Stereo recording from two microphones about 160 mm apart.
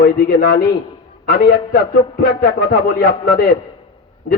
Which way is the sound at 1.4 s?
70° left (ahead or behind).